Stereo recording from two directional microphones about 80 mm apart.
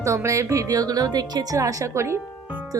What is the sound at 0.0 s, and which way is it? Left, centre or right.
Speech, right.